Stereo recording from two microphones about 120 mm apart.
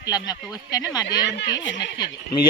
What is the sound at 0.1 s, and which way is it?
Speech, 35° left (ahead or behind).